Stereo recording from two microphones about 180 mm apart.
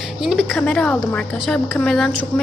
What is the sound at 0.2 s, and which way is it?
A woman's voice, centre (ahead or behind).